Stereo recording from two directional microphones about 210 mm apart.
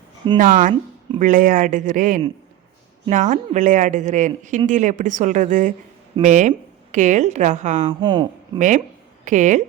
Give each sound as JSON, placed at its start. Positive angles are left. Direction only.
{"t": 0.3, "sound": "speech", "side_deg": -40}
{"t": 7.9, "sound": "speech", "side_deg": -25}
{"t": 8.5, "sound": "speech", "side_deg": -35}